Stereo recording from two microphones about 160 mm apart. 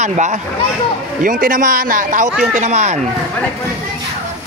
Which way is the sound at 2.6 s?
45° right (ahead or behind).